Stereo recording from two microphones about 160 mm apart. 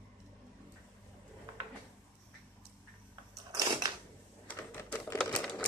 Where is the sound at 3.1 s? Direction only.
20° right (ahead or behind).